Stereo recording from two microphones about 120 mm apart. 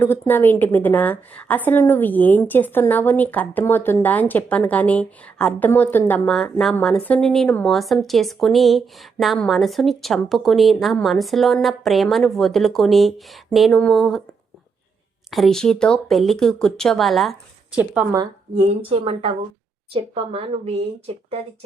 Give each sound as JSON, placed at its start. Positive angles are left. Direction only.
{"t": 0.0, "sound": "a woman's voice", "side_deg": 15}
{"t": 15.3, "sound": "a woman's voice", "side_deg": 0}
{"t": 18.5, "sound": "a woman's voice", "side_deg": -55}